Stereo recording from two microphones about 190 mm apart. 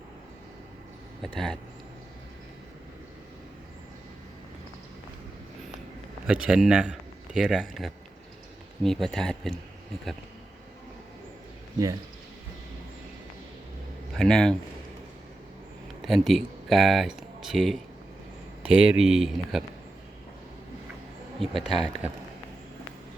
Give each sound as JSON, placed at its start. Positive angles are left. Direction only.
{"t": 6.2, "sound": "a man's voice", "side_deg": -5}
{"t": 14.2, "sound": "a man's voice", "side_deg": 5}
{"t": 16.0, "sound": "a man's voice", "side_deg": 0}
{"t": 21.4, "sound": "a man's voice", "side_deg": 0}